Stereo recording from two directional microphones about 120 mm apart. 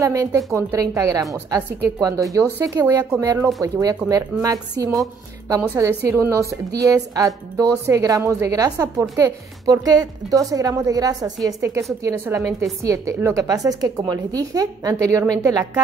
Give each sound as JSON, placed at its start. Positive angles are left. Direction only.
{"t": 0.0, "sound": "speech", "side_deg": -30}